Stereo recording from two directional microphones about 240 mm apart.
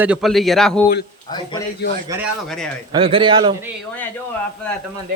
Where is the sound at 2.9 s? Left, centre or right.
Right.